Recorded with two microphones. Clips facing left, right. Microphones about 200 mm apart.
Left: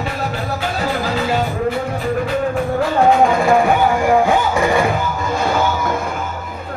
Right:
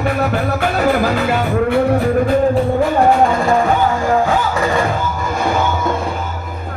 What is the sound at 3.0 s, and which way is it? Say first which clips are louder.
Music: left 3 dB; centre (ahead or behind).